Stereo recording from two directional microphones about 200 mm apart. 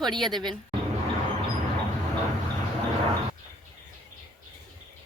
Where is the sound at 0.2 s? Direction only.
Centre (ahead or behind).